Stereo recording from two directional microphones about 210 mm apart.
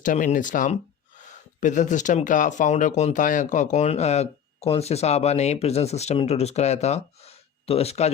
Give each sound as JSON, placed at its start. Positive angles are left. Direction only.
{"t": 0.0, "sound": "speech", "side_deg": 40}